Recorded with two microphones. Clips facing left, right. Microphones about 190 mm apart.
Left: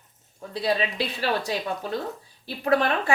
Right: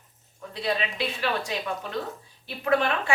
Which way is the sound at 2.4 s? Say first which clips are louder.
Left 2 dB; 35° left (ahead or behind).